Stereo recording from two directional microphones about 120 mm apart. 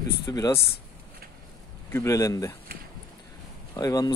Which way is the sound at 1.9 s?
25° left (ahead or behind).